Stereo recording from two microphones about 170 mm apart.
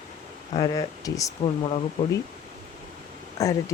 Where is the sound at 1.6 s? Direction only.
35° left (ahead or behind).